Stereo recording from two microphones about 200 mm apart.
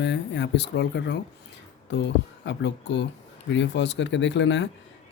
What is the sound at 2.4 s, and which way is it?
Speech, 60° left (ahead or behind).